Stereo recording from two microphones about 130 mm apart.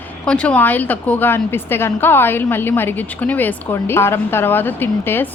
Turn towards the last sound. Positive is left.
turn(degrees=15)  # may be behind; listen again after turning